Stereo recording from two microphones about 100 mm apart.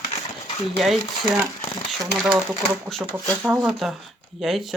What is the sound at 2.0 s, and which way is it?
Speech, 5° right (ahead or behind).